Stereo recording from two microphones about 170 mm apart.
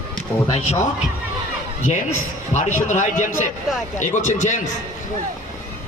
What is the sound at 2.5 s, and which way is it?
A man's voice, 45° left (ahead or behind).